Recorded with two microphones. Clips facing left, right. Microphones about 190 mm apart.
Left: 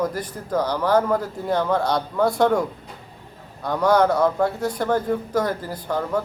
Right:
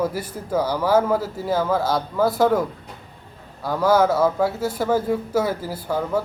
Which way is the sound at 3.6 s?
5° right (ahead or behind).